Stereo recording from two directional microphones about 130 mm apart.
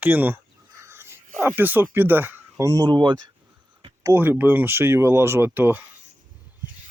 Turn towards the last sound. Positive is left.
turn(degrees=-15)  # may be behind; listen again after turning